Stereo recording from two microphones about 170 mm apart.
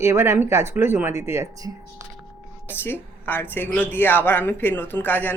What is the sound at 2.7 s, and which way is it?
Speech, 10° left (ahead or behind).